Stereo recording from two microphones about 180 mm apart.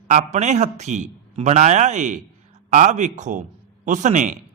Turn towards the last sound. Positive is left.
turn(degrees=-45)  # may be behind; listen again after turning